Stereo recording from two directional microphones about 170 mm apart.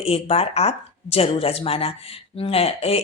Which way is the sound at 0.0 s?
35° left (ahead or behind).